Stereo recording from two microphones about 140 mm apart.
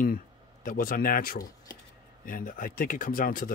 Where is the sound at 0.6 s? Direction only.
85° left.